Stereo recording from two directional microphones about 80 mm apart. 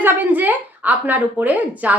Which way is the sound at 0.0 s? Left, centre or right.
Right.